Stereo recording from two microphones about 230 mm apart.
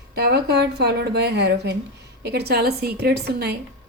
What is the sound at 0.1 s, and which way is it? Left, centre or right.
Speech, right.